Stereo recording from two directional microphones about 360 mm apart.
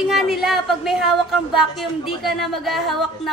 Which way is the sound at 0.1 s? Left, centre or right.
Centre.